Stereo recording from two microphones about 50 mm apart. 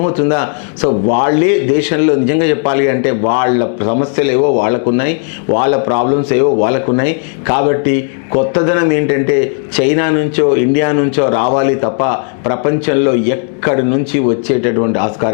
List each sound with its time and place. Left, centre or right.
0.2 s a man's voice: centre